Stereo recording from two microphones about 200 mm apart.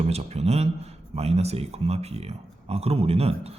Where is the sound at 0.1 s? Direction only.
30° right (ahead or behind).